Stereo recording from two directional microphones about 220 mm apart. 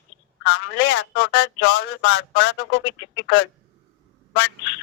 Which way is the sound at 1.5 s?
55° left (ahead or behind).